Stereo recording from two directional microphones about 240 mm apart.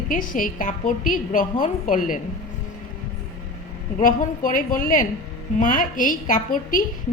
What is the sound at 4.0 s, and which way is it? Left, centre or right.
A woman's voice, left.